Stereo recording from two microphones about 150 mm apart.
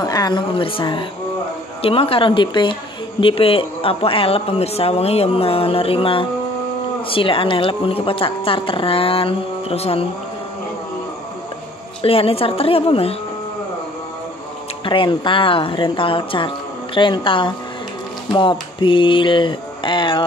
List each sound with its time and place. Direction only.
0.0 s speech: 25° left (ahead or behind)
12.0 s speech: 40° left (ahead or behind)
14.9 s speech: 35° left (ahead or behind)